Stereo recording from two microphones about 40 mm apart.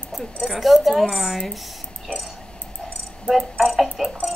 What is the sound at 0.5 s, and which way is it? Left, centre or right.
Speech, centre.